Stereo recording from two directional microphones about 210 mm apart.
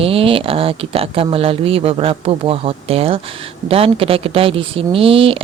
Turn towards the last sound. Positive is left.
turn(degrees=-25)  # may be behind; listen again after turning